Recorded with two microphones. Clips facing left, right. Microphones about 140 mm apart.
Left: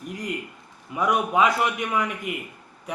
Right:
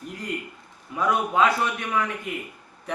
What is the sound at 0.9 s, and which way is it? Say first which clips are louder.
A man's voice: left 1 dB; 15° left (ahead or behind).